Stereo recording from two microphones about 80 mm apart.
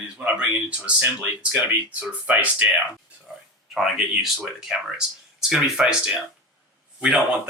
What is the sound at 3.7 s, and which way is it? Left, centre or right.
Speech, centre.